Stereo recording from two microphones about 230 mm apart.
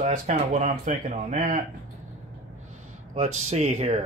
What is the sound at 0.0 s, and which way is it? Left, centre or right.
Speech, right.